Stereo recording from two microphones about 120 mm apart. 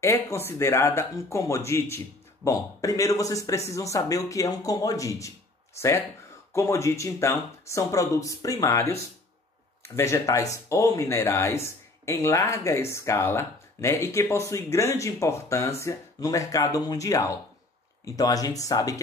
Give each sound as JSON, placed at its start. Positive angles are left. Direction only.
{"t": 0.0, "sound": "speech", "side_deg": 25}
{"t": 6.5, "sound": "speech", "side_deg": 25}
{"t": 9.9, "sound": "speech", "side_deg": 25}